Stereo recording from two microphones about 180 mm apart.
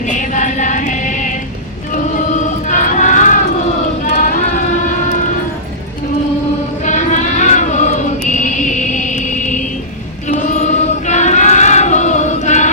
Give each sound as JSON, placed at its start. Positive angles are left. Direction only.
{"t": 0.1, "sound": "music", "side_deg": 45}
{"t": 1.9, "sound": "choir", "side_deg": 45}
{"t": 4.0, "sound": "a sound", "side_deg": 50}
{"t": 6.8, "sound": "choir", "side_deg": 40}
{"t": 8.3, "sound": "a sound", "side_deg": 45}
{"t": 10.2, "sound": "choir", "side_deg": 40}